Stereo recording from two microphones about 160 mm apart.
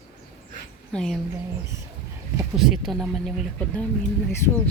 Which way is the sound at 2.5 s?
Centre (ahead or behind).